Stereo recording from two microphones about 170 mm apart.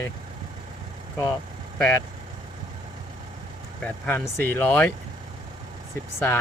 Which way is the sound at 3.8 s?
10° left (ahead or behind).